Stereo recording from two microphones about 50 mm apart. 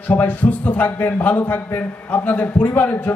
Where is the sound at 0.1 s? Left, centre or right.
Left.